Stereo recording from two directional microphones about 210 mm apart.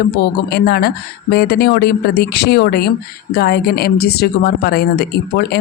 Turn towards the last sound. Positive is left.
turn(degrees=50)  # may be behind; listen again after turning